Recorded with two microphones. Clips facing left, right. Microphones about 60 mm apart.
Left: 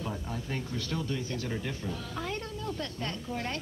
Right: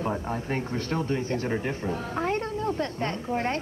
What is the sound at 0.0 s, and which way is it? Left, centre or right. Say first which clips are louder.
Speech: right 8 dB; right.